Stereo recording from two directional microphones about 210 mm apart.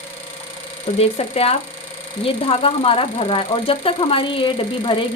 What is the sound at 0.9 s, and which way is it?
Speech, 30° left (ahead or behind).